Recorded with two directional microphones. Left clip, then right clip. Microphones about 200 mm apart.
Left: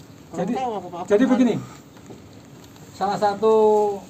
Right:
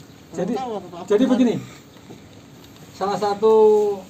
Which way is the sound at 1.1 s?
10° left (ahead or behind).